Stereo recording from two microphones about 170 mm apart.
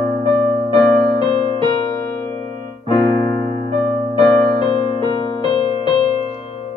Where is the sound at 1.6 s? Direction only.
25° left (ahead or behind).